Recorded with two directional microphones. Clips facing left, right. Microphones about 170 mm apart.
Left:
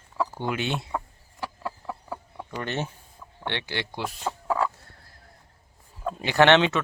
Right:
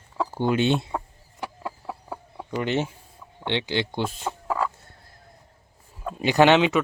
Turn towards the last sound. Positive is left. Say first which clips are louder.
# right 2 dB
turn(degrees=-10)  # may be behind; listen again after turning